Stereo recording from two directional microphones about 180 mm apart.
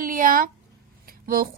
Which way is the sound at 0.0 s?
50° right (ahead or behind).